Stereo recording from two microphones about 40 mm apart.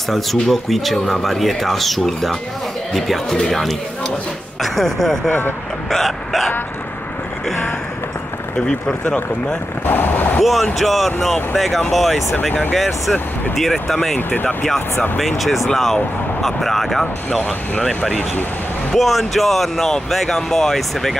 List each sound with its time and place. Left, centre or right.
0.1 s speech: centre
5.9 s hiccup: centre
8.5 s speech: centre
9.8 s speech: left
10.4 s speech: centre
14.1 s speech: left
15.1 s speech: centre